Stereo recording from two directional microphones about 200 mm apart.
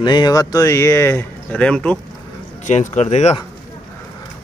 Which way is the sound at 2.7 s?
35° left (ahead or behind).